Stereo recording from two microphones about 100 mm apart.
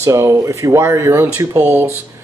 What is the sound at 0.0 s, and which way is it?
Speech, 30° right (ahead or behind).